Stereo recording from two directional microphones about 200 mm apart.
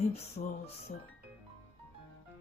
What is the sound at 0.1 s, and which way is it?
Music, 30° left (ahead or behind).